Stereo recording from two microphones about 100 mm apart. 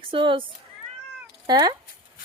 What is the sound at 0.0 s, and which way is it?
Speech, 60° right (ahead or behind).